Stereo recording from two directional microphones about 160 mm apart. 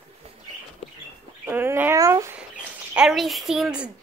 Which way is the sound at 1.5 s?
10° right (ahead or behind).